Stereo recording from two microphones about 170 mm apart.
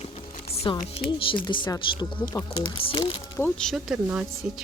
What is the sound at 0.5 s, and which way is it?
Music, 35° left (ahead or behind).